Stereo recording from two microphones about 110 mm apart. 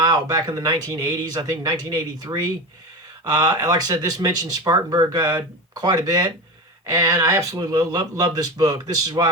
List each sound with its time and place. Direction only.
0.0 s speech: 35° right (ahead or behind)